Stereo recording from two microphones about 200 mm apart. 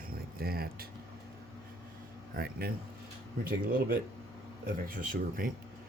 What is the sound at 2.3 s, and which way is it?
Speech, 50° right (ahead or behind).